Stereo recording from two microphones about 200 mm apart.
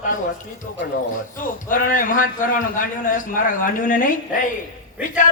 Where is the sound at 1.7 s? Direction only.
40° left (ahead or behind).